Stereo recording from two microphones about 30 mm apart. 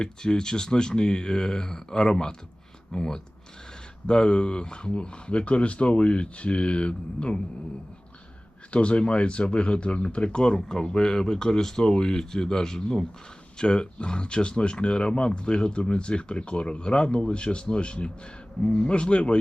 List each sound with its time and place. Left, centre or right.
0.0 s speech: left
8.7 s speech: left
10.7 s speech: left
13.6 s speech: left